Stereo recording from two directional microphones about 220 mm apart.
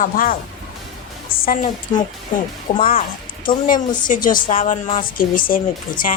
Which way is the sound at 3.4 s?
40° left (ahead or behind).